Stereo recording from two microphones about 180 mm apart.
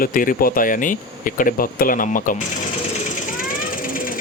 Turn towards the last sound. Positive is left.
turn(degrees=50)  # may be behind; listen again after turning